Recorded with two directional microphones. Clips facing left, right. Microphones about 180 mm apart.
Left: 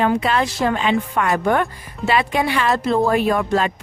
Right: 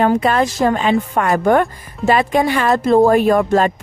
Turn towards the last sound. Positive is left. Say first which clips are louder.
# right 5 dB
turn(degrees=-45)  # may be behind; listen again after turning